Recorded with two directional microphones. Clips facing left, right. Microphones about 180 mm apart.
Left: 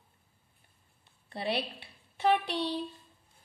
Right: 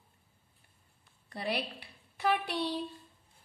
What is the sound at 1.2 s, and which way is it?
A woman's voice, 30° left (ahead or behind).